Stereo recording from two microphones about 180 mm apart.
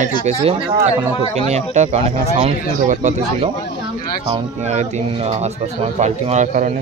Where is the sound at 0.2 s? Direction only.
35° right (ahead or behind).